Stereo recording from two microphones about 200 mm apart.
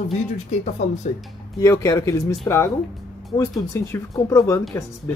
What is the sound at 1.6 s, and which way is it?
Speech, 15° left (ahead or behind).